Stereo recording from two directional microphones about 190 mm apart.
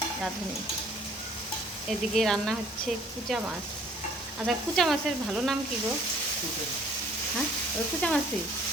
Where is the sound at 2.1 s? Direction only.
Centre (ahead or behind).